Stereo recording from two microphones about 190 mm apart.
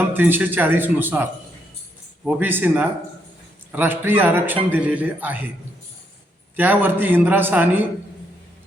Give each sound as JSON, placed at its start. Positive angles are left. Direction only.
{"t": 0.1, "sound": "a man's voice", "side_deg": -10}
{"t": 6.6, "sound": "a man's voice", "side_deg": -10}